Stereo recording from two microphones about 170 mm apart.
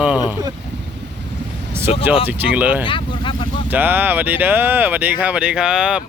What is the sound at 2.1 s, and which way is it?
Speech, 10° right (ahead or behind).